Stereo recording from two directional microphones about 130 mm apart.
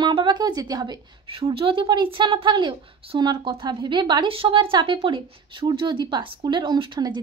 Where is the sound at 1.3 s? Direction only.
45° right (ahead or behind).